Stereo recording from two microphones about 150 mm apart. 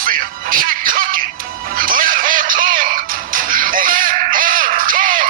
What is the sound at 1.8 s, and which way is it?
Music, 70° right (ahead or behind).